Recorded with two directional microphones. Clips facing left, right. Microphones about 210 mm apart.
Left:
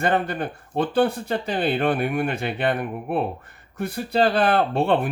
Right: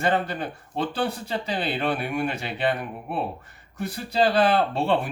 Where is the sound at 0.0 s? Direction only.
55° left (ahead or behind).